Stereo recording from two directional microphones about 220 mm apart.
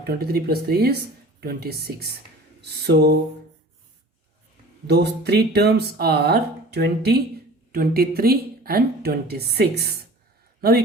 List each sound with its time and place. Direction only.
0.0 s speech: 45° right (ahead or behind)
4.9 s a man's voice: 50° right (ahead or behind)